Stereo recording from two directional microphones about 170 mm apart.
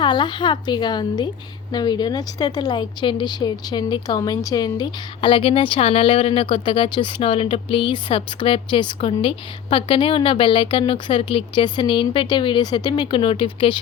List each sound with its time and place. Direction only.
0.0 s speech: 25° left (ahead or behind)